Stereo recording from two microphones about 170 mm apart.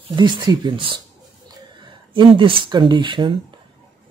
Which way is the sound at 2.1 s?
30° right (ahead or behind).